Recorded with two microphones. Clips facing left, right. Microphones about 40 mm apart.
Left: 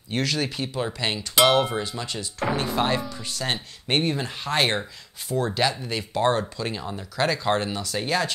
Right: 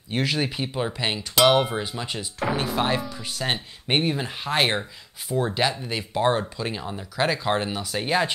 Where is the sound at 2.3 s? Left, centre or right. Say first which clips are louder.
Even; centre.